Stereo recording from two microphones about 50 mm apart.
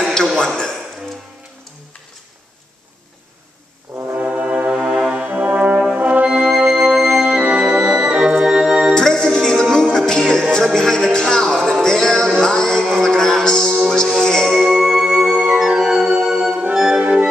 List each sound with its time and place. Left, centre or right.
0.6 s a sound: centre
3.9 s brass instrument: right
4.2 s brass instrument: right
4.7 s music: centre
5.3 s brass instrument: right
6.5 s music: centre
7.2 s music: right
7.6 s organ: right
8.9 s music: centre
14.6 s organ: centre
16.7 s music: centre